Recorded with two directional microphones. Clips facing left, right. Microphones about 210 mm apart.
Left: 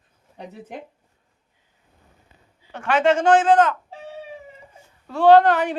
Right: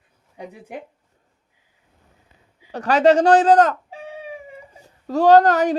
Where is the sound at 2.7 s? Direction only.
40° right (ahead or behind).